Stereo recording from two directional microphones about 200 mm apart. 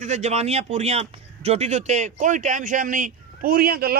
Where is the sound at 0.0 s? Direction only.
35° right (ahead or behind).